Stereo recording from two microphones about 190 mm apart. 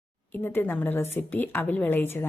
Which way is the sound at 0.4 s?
10° left (ahead or behind).